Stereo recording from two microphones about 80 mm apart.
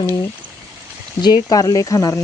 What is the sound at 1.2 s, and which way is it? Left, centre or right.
Speech, left.